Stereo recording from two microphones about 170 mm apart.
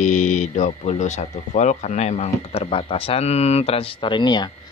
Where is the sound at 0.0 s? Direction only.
45° left (ahead or behind).